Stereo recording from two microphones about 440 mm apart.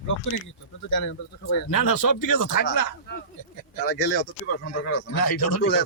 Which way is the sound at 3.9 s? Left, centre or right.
Left.